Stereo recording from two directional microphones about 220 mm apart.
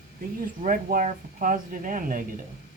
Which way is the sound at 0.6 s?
40° right (ahead or behind).